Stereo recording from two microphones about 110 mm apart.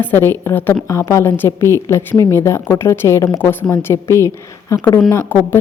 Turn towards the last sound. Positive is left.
turn(degrees=25)  # may be behind; listen again after turning